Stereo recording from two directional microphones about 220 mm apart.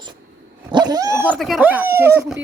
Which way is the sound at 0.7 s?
20° right (ahead or behind).